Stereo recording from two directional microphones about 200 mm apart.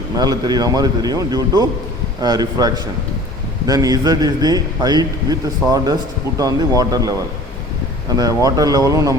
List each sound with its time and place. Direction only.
0.2 s a man's voice: 20° right (ahead or behind)
8.1 s speech: 15° right (ahead or behind)